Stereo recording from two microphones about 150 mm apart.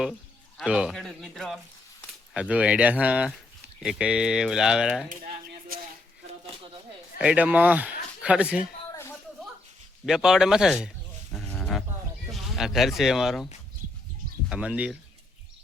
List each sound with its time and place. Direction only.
0.0 s a man's voice: 5° right (ahead or behind)
7.2 s speech: 10° right (ahead or behind)
8.9 s a sound: 15° left (ahead or behind)
10.1 s speech: 5° right (ahead or behind)
11.4 s a sound: 10° left (ahead or behind)
12.3 s speech: centre (ahead or behind)
14.5 s speech: 10° right (ahead or behind)